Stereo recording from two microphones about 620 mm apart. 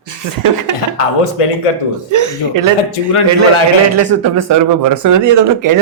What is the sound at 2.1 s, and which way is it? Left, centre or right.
Speech, right.